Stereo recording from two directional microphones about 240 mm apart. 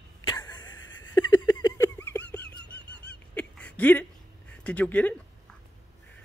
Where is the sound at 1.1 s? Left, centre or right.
Centre.